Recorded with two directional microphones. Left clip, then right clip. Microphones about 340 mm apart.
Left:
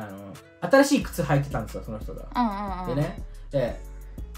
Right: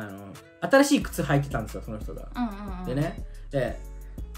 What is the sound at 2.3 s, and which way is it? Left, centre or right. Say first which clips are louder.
Speech: left 8 dB; centre.